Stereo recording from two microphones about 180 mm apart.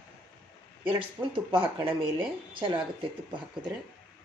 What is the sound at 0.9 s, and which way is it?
Speech, 30° right (ahead or behind).